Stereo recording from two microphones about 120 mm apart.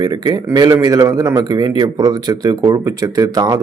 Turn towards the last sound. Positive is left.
turn(degrees=-30)  # may be behind; listen again after turning